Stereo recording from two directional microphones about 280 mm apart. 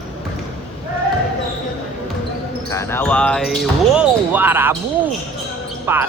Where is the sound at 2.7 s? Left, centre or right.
Centre.